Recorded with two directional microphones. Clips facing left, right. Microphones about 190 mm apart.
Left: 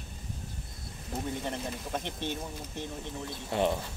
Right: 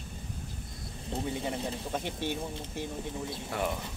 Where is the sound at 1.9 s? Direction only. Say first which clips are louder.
Right 1 dB; 10° right (ahead or behind).